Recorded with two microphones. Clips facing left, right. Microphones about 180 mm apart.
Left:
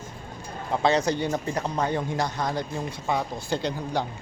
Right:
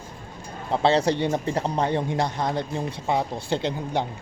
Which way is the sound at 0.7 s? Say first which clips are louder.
Right 2 dB; 30° right (ahead or behind).